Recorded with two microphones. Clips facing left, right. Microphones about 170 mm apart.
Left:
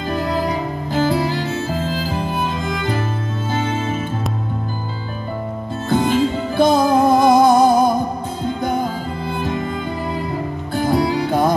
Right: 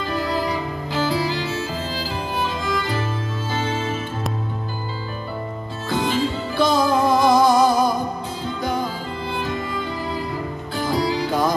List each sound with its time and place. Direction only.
0.1 s music: 50° left (ahead or behind)
5.9 s music: 50° left (ahead or behind)